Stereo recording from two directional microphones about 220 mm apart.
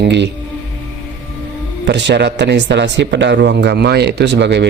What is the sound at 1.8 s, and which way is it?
Speech, 50° right (ahead or behind).